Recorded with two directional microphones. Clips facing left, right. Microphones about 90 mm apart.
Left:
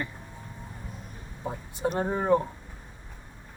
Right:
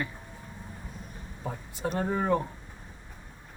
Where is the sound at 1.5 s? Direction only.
20° left (ahead or behind).